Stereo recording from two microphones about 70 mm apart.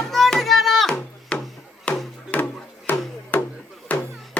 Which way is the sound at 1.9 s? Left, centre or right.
Centre.